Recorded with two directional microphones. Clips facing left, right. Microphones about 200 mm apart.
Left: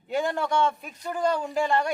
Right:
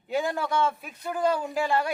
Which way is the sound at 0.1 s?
Centre (ahead or behind).